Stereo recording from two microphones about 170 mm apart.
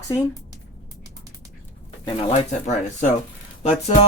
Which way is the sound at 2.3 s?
45° left (ahead or behind).